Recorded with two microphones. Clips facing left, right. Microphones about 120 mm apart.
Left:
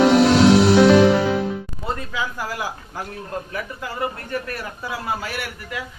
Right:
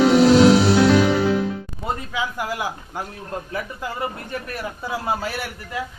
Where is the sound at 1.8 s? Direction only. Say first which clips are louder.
Right 2 dB; 15° right (ahead or behind).